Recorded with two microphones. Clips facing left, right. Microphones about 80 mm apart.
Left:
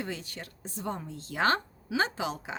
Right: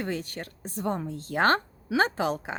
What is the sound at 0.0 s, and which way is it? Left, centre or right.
Speech, right.